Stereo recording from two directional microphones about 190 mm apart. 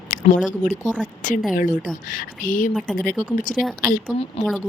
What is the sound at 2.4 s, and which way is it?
Speech, 45° left (ahead or behind).